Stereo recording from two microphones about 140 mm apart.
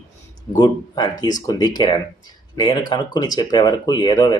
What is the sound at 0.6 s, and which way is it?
Speech, 30° left (ahead or behind).